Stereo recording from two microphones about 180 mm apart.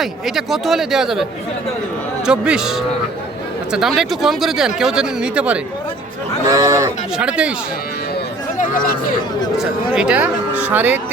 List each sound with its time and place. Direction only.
0.0 s speech: centre (ahead or behind)
6.5 s speech: 20° right (ahead or behind)
7.2 s speech: 5° right (ahead or behind)
9.9 s speech: 5° right (ahead or behind)